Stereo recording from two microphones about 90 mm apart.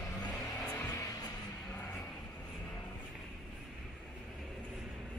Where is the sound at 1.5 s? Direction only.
20° left (ahead or behind).